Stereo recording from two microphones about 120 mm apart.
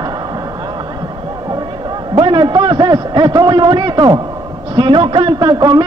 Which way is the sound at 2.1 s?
45° right (ahead or behind).